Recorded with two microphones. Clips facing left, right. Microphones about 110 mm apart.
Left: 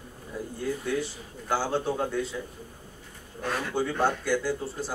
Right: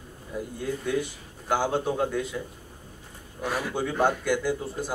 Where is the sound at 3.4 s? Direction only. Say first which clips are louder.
Even; 10° right (ahead or behind).